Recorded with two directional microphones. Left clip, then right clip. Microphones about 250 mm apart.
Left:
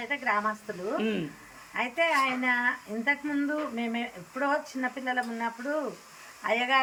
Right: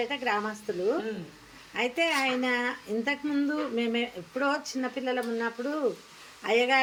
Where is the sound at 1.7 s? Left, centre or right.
Centre.